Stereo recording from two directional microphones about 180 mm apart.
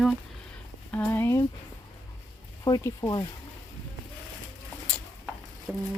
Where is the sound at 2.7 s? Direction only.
20° left (ahead or behind).